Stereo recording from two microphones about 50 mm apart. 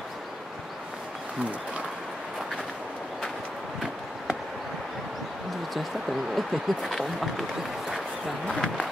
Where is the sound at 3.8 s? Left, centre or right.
Centre.